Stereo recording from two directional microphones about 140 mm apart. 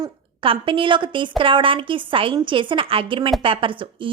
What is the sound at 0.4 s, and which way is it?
A woman's voice, 40° right (ahead or behind).